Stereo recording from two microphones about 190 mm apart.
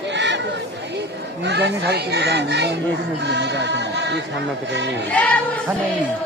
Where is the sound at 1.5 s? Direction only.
60° right (ahead or behind).